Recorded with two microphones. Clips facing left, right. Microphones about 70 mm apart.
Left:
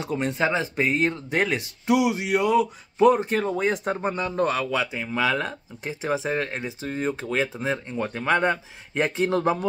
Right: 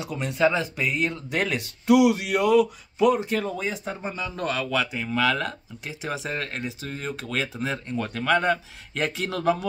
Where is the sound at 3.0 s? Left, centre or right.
Left.